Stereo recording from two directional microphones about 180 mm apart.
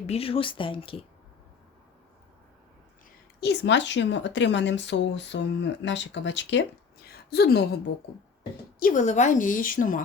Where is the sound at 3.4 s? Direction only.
75° left (ahead or behind); by 6.6 s 90° left.